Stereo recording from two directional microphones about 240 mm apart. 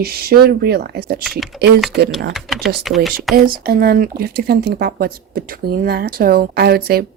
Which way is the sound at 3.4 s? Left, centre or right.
Right.